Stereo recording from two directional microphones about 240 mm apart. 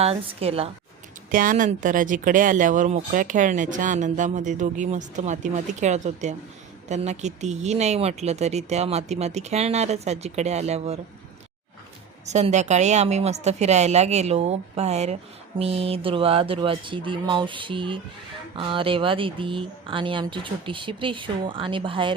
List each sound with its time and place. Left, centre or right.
0.0 s speech: right
1.3 s speech: right
12.2 s speech: right